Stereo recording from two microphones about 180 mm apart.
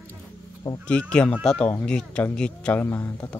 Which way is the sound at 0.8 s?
5° left (ahead or behind).